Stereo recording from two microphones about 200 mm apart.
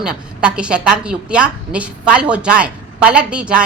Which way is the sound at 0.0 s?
5° right (ahead or behind).